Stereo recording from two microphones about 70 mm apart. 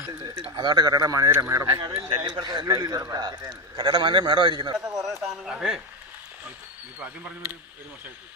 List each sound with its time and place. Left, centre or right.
0.2 s speech: right
0.9 s speech: right
1.7 s speech: right
2.6 s a man's voice: right
5.0 s a man's voice: centre